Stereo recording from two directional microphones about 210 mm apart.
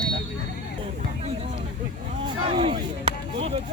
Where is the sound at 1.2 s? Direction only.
30° right (ahead or behind).